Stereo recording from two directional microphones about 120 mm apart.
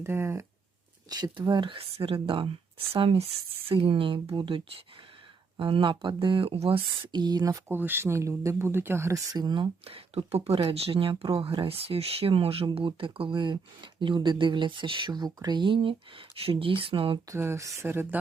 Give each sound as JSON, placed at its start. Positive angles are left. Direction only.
{"t": 0.0, "sound": "speech", "side_deg": -20}
{"t": 1.1, "sound": "speech", "side_deg": -40}
{"t": 7.7, "sound": "speech", "side_deg": -15}
{"t": 9.2, "sound": "speech", "side_deg": -35}
{"t": 9.8, "sound": "speech", "side_deg": -50}
{"t": 17.2, "sound": "speech", "side_deg": -20}